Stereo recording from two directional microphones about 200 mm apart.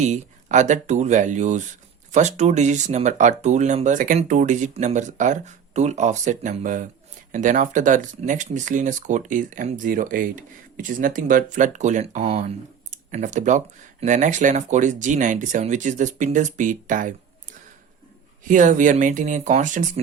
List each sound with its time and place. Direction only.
0.0 s speech: 35° right (ahead or behind)
18.4 s speech: 40° right (ahead or behind)